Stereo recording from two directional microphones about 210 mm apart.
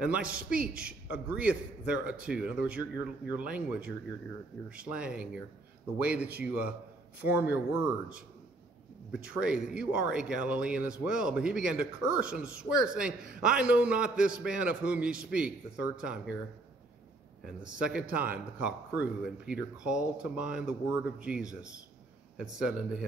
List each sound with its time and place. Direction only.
0.0 s speech: 5° right (ahead or behind)
0.3 s a man's voice: 45° right (ahead or behind)
0.6 s speech: 5° right (ahead or behind)
9.1 s speech: 5° right (ahead or behind)
17.4 s speech: 5° right (ahead or behind)